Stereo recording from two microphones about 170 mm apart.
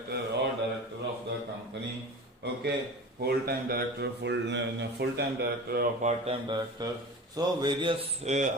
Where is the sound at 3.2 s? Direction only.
65° right (ahead or behind); by 5.2 s 85° right.